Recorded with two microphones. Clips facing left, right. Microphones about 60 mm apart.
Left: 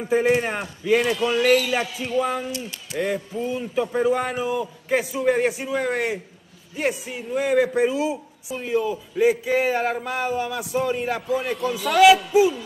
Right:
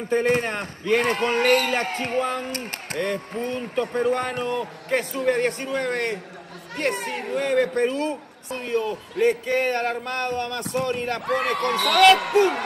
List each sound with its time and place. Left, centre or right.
0.0 s a man's voice: centre
0.9 s speech: right
3.5 s a man's voice: centre
6.9 s a man's voice: right
7.3 s a man's voice: centre
11.2 s a man's voice: right